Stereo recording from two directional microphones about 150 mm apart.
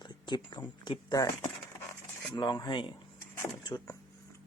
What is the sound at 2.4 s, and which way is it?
Speech, 30° left (ahead or behind).